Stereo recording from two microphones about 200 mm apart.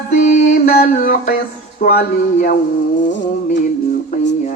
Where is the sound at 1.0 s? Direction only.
45° left (ahead or behind).